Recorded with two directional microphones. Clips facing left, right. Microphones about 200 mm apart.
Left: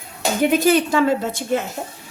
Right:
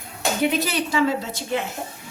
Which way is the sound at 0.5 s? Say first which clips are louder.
Left 7 dB; 50° left (ahead or behind).